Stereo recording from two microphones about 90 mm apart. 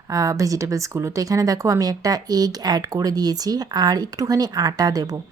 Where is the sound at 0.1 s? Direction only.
35° right (ahead or behind).